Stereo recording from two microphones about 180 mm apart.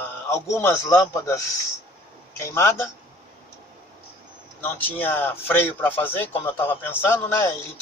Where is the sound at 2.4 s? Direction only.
15° left (ahead or behind).